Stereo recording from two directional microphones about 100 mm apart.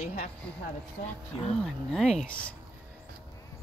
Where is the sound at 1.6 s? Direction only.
5° left (ahead or behind).